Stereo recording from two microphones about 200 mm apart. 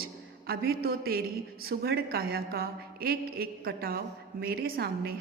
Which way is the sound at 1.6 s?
50° right (ahead or behind).